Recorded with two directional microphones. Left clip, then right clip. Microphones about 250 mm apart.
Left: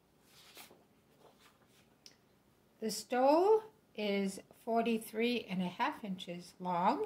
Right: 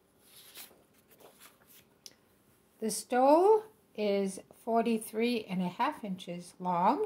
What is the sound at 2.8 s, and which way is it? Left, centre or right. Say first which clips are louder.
Speech: right 4 dB; right.